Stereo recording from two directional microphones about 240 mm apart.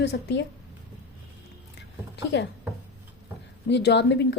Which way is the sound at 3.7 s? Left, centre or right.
Left.